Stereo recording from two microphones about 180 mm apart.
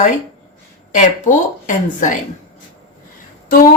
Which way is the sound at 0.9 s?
45° left (ahead or behind).